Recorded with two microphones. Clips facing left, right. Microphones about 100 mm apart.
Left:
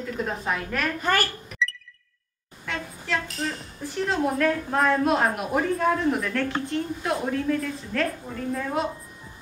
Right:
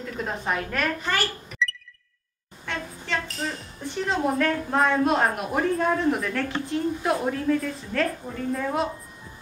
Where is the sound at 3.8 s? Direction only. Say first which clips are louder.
Even; centre (ahead or behind).